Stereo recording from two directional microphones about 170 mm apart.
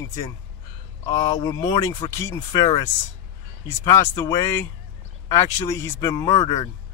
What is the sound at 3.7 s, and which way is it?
Speech, 20° left (ahead or behind).